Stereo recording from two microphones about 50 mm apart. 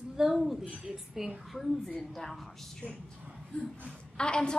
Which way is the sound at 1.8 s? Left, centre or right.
Centre.